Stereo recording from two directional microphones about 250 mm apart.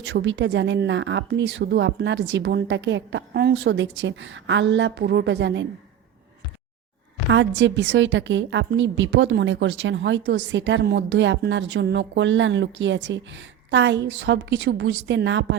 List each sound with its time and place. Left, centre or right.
0.0 s a woman's voice: right
7.3 s a woman's voice: right